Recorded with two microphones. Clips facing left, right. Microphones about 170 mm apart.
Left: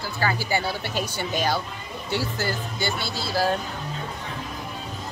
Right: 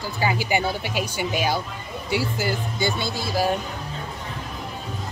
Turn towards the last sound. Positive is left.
turn(degrees=-15)  # may be behind; listen again after turning